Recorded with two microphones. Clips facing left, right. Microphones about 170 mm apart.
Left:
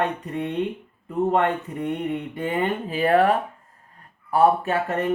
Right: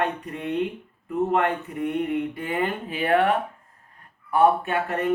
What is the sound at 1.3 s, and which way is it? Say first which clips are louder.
Speech: left 2 dB; 30° left (ahead or behind).